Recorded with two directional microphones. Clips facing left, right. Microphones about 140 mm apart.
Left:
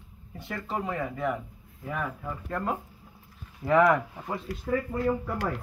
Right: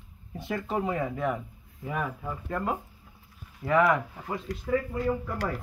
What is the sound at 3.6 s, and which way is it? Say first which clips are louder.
Speech: left 2 dB; centre (ahead or behind).